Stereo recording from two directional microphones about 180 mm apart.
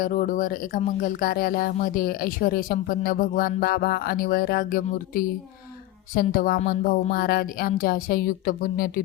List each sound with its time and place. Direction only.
0.0 s a woman's voice: 50° left (ahead or behind)